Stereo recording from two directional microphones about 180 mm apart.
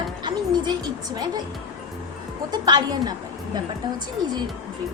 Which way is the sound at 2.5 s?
25° right (ahead or behind).